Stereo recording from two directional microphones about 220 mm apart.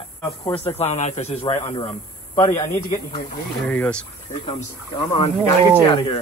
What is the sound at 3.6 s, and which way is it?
Speech, 5° left (ahead or behind).